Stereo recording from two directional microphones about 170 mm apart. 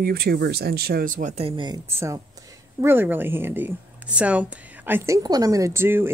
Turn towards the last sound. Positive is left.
turn(degrees=-15)  # may be behind; listen again after turning